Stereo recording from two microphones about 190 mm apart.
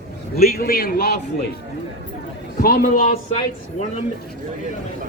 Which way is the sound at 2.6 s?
50° left (ahead or behind).